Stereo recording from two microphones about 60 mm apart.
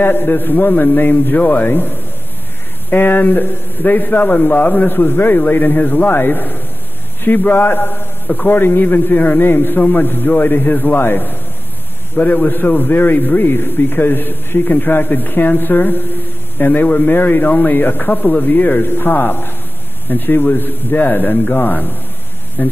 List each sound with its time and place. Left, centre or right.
0.0 s a man's voice: left